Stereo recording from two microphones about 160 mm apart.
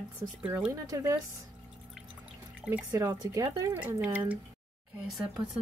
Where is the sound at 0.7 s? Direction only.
20° right (ahead or behind).